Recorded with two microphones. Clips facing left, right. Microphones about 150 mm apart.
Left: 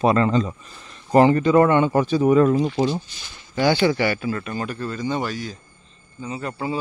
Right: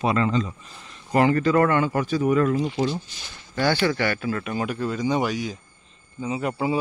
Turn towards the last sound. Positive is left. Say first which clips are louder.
# right 3 dB
turn(degrees=-15)  # may be behind; listen again after turning